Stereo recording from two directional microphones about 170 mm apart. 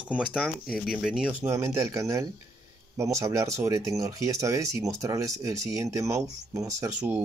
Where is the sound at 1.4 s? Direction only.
20° right (ahead or behind).